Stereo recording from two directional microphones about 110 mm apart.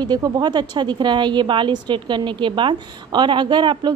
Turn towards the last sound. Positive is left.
turn(degrees=-45)  # may be behind; listen again after turning